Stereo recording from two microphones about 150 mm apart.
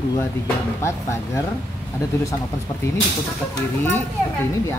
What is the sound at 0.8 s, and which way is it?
Speech, 20° left (ahead or behind).